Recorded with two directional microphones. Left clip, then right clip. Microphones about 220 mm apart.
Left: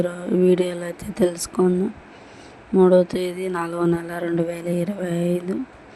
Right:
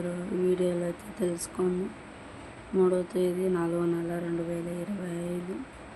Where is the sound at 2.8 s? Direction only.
35° left (ahead or behind).